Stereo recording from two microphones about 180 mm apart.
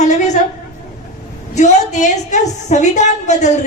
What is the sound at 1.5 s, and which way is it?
A woman's voice, 40° left (ahead or behind).